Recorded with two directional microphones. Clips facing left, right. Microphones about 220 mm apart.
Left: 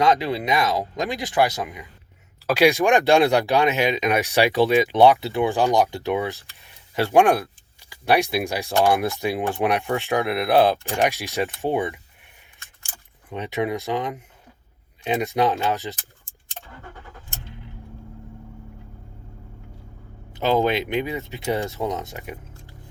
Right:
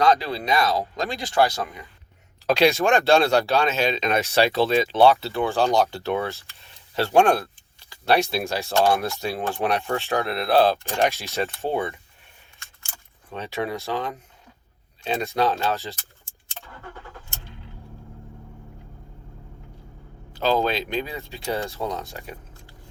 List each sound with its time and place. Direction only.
0.0 s speech: 20° left (ahead or behind)
13.3 s speech: 15° left (ahead or behind)
20.3 s speech: 20° left (ahead or behind)